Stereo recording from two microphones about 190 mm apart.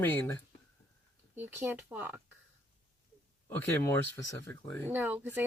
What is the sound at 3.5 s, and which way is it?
Speech, 15° left (ahead or behind).